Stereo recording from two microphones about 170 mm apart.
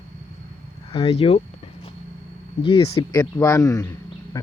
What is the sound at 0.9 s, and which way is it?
Speech, 35° left (ahead or behind).